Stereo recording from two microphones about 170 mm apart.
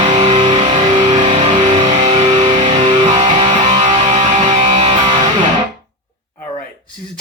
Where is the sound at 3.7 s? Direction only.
45° right (ahead or behind); by 5.3 s 30° right (ahead or behind).